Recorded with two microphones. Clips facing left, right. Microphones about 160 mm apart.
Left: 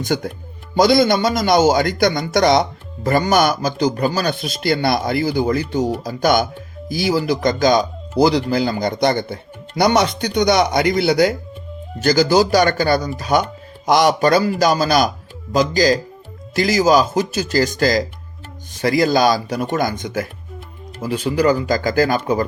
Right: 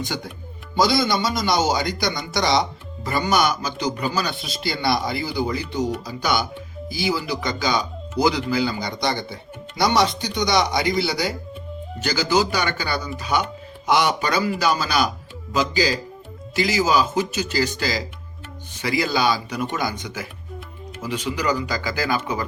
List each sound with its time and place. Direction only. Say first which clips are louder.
0.0 s a man's voice: left 8 dB; 50° left (ahead or behind)
12.0 s a man's voice: left 7 dB; 40° left (ahead or behind)